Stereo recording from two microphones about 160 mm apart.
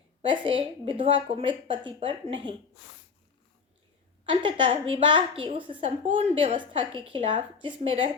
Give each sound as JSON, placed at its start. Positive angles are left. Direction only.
{"t": 0.2, "sound": "a woman's voice", "side_deg": -35}
{"t": 4.3, "sound": "a woman's voice", "side_deg": -30}